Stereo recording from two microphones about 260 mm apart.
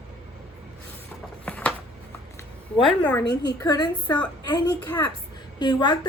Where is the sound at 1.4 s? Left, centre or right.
Centre.